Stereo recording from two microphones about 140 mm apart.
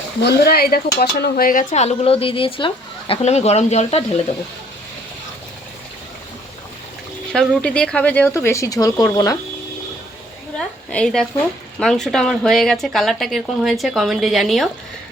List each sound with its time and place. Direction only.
0.4 s speech: 90° left
1.7 s a woman's voice: 50° left (ahead or behind)
3.2 s a woman's voice: 50° left (ahead or behind)
7.3 s speech: 5° left (ahead or behind); by 9.4 s 25° left (ahead or behind)
10.6 s speech: 5° left (ahead or behind)